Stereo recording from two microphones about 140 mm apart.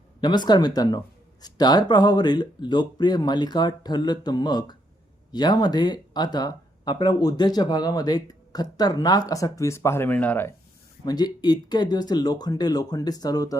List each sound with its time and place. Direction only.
0.2 s speech: 30° left (ahead or behind); by 10.5 s 10° left (ahead or behind)
11.0 s speech: 30° left (ahead or behind)